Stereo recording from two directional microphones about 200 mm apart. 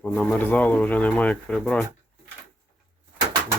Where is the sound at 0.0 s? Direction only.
5° left (ahead or behind).